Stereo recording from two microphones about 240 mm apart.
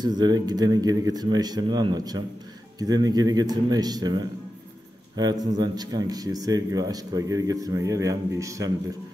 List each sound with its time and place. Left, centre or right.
0.0 s speech: centre